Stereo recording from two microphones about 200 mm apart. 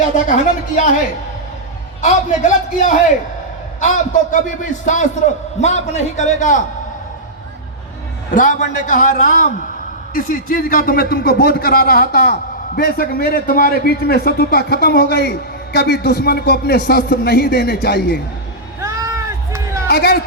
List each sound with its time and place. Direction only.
2.0 s a man's voice: 35° left (ahead or behind)
8.3 s a man's voice: 40° left (ahead or behind)
18.8 s run: 15° right (ahead or behind)
19.9 s speech: 50° left (ahead or behind)